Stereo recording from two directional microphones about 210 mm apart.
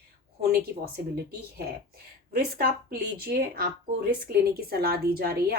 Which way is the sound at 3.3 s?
45° right (ahead or behind).